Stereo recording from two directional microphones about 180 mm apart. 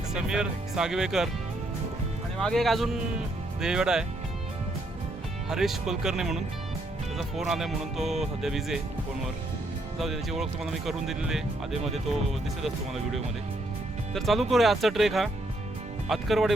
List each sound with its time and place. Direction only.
0.1 s speech: 5° right (ahead or behind)
2.4 s speech: centre (ahead or behind)
5.5 s speech: 5° right (ahead or behind)
10.0 s speech: centre (ahead or behind)